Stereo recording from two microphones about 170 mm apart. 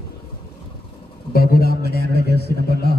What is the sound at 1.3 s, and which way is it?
Speech, 65° left (ahead or behind).